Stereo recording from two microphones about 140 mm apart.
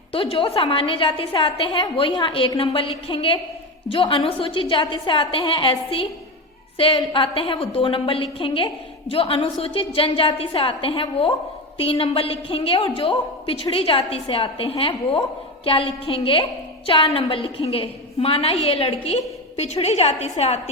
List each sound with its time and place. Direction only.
0.1 s a woman's voice: 40° left (ahead or behind)